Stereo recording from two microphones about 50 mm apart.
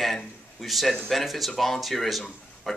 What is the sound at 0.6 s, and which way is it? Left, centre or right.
Speech, centre.